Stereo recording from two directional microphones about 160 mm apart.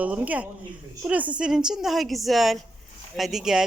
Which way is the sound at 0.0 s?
10° right (ahead or behind).